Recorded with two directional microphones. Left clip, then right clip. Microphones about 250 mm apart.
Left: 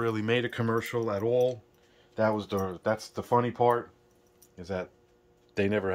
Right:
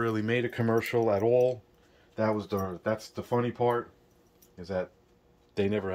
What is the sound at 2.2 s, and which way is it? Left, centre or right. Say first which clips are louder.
Speech: left 2 dB; centre.